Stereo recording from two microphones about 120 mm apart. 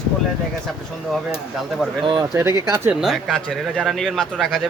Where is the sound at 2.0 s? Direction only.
40° right (ahead or behind).